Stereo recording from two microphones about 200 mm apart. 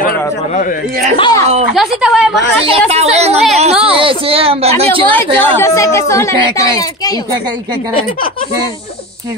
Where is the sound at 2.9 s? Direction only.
30° right (ahead or behind).